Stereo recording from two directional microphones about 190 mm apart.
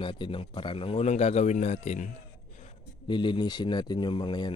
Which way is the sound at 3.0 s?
25° left (ahead or behind).